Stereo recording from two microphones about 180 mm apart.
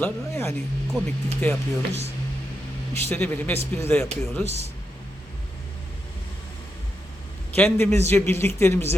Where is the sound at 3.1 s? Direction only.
10° left (ahead or behind).